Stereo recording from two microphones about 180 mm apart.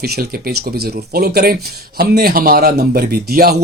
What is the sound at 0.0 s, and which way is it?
Speech, 60° right (ahead or behind).